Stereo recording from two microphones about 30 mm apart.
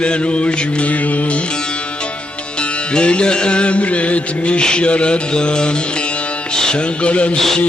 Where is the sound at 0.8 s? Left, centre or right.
Left.